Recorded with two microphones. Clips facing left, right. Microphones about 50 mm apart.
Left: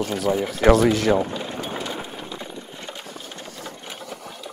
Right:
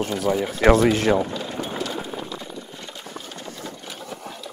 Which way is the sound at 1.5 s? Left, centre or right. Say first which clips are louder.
Right 1 dB; centre.